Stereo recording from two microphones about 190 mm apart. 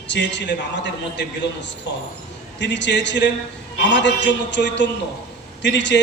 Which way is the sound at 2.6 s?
70° left (ahead or behind).